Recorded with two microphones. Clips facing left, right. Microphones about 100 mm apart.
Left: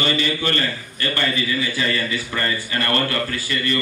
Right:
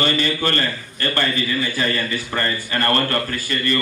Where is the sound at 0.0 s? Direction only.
45° right (ahead or behind).